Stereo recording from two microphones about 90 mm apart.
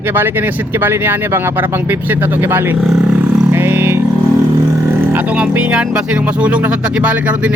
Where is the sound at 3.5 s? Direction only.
25° right (ahead or behind).